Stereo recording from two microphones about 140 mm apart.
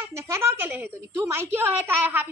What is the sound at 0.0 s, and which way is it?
A woman's voice, 20° right (ahead or behind).